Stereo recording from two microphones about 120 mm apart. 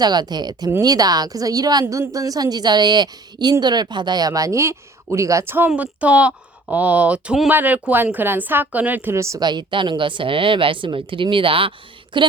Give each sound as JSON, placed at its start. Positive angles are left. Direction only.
{"t": 0.0, "sound": "a woman's voice", "side_deg": -35}
{"t": 9.4, "sound": "speech", "side_deg": -40}